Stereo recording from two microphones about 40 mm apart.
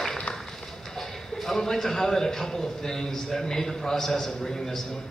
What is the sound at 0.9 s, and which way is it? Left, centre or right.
A man's voice, centre.